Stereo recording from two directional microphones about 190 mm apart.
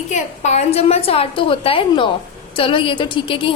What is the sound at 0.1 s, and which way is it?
A woman's voice, 35° left (ahead or behind).